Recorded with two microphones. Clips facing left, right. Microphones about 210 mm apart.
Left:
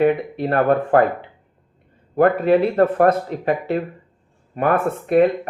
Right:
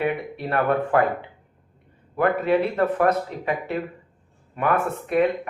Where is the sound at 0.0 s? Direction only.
40° left (ahead or behind).